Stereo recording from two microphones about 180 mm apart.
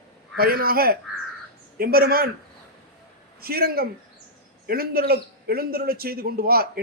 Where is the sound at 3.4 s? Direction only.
60° right (ahead or behind).